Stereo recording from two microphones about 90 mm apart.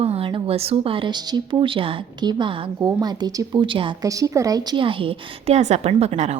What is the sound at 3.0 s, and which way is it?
Speech, 50° right (ahead or behind).